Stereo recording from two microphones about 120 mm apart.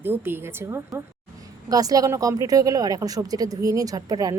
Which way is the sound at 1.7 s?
30° right (ahead or behind).